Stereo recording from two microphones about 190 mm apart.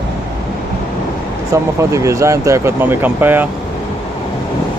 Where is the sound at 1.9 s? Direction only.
15° right (ahead or behind).